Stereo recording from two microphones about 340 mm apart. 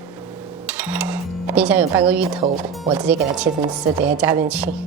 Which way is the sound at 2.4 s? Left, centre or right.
Centre.